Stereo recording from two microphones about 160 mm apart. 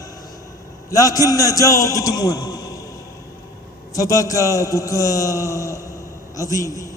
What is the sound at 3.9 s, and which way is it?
Mantra, 20° left (ahead or behind).